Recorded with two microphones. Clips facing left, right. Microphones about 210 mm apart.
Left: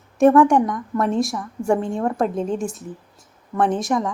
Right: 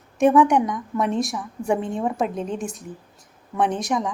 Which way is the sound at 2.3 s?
45° left (ahead or behind).